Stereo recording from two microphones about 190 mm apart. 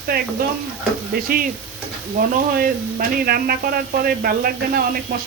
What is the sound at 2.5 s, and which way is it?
Speech, 50° right (ahead or behind).